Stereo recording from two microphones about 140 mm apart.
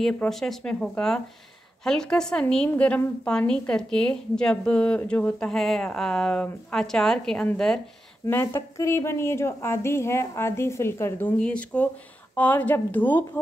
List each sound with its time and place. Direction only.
0.0 s a woman's voice: centre (ahead or behind)
8.3 s a woman's voice: 20° left (ahead or behind)